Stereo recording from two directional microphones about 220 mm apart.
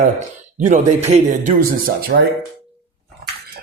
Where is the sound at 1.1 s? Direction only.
30° right (ahead or behind).